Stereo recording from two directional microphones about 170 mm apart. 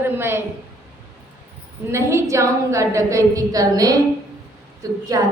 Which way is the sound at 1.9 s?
15° right (ahead or behind).